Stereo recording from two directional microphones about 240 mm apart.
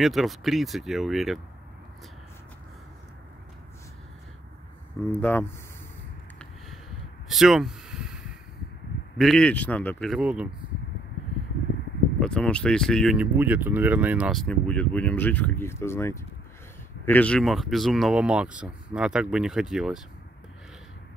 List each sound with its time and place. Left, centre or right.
0.0 s speech: centre
5.1 s speech: centre
7.2 s a sound: centre
9.2 s speech: centre
12.2 s speech: centre